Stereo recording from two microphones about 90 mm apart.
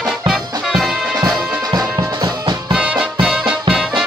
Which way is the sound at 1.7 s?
55° right (ahead or behind).